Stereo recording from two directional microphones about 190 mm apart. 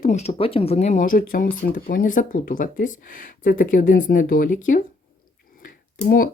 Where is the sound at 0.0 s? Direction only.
35° left (ahead or behind).